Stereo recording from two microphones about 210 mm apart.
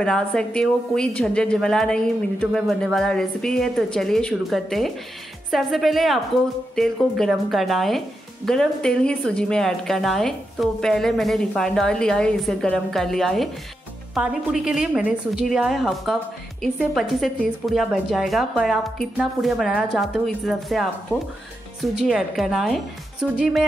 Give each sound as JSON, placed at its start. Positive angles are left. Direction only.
{"t": 0.0, "sound": "a woman's voice", "side_deg": 5}
{"t": 21.9, "sound": "a woman's voice", "side_deg": 0}